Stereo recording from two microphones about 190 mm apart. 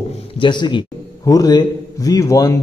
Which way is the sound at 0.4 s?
25° left (ahead or behind).